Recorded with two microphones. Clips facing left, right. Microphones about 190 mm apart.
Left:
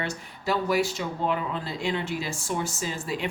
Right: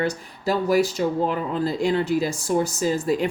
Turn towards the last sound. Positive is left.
turn(degrees=-40)  # may be behind; listen again after turning